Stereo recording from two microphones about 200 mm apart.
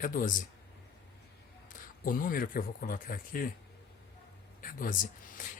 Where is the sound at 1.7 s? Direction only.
45° left (ahead or behind).